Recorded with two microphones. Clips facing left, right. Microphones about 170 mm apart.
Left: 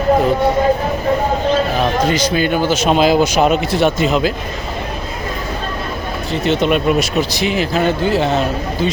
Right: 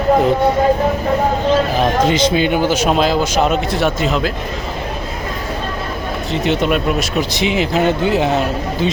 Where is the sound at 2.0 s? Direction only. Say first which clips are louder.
Right 2 dB; 20° right (ahead or behind).